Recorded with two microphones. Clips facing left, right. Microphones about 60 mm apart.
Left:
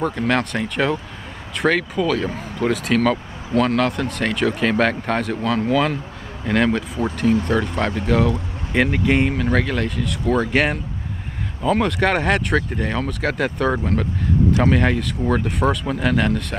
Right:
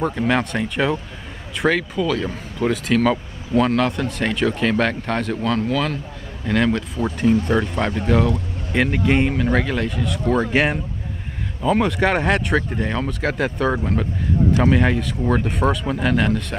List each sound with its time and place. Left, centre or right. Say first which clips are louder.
0.0 s speech: even; centre
6.7 s speech: even; centre
8.1 s speech: even; centre